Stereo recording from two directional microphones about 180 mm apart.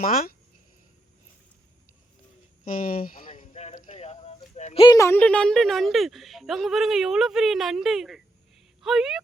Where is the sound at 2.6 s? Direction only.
50° left (ahead or behind).